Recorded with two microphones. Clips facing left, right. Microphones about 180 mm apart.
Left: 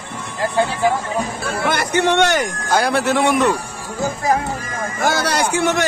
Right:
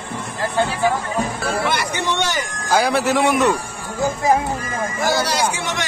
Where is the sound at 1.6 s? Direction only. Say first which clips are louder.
Left 8 dB; 50° left (ahead or behind).